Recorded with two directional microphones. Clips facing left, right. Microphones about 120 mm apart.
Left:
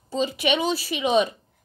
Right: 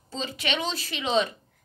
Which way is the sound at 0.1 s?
15° left (ahead or behind).